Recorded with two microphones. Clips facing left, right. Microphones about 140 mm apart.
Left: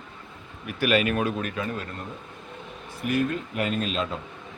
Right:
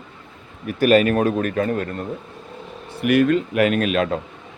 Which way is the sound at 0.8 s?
45° right (ahead or behind).